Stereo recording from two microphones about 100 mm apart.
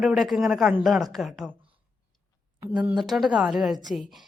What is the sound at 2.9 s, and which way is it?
A man's voice, centre (ahead or behind).